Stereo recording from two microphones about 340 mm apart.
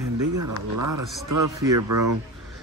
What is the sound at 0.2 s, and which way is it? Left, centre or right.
Speech, right.